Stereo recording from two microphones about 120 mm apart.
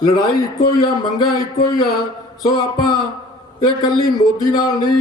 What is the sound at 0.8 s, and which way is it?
Speech, 35° left (ahead or behind).